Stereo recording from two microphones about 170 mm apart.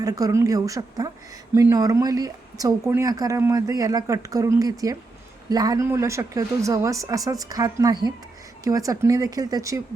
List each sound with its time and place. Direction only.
0.0 s speech: 20° right (ahead or behind)